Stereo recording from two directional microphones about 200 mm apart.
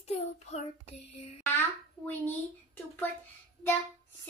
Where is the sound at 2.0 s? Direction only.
10° left (ahead or behind).